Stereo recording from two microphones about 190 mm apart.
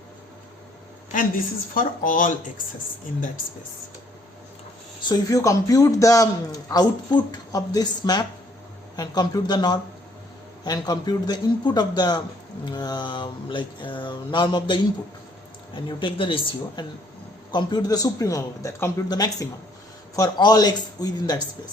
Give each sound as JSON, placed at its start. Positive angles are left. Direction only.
{"t": 1.7, "sound": "speech", "side_deg": 45}
{"t": 5.0, "sound": "a man's voice", "side_deg": 15}